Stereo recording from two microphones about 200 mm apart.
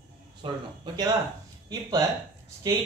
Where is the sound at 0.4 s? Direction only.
25° right (ahead or behind).